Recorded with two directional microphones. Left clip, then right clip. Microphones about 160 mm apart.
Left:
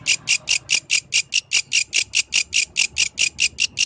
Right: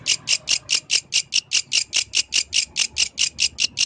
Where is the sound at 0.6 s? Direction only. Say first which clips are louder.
Left 1 dB; 10° left (ahead or behind).